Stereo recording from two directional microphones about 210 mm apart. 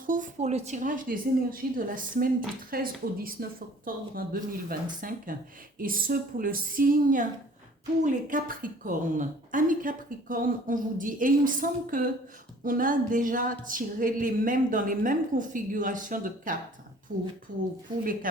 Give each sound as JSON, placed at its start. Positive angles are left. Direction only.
{"t": 0.0, "sound": "a woman's voice", "side_deg": -40}
{"t": 18.0, "sound": "speech", "side_deg": -40}